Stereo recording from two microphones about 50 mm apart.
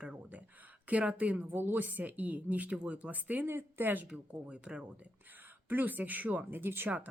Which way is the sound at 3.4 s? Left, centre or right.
Right.